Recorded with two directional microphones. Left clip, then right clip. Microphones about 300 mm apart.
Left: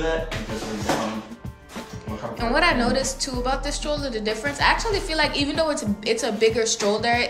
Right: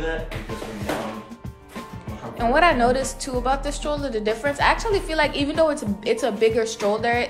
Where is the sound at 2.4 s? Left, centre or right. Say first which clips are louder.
Right 3 dB; centre.